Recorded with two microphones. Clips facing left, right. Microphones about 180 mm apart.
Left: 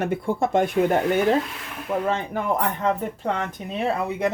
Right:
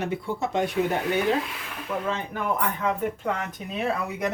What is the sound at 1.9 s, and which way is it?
Speech, 30° left (ahead or behind).